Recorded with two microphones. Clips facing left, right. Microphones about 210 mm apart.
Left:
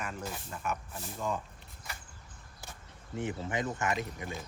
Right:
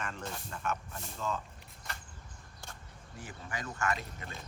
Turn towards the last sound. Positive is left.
turn(degrees=15)  # may be behind; listen again after turning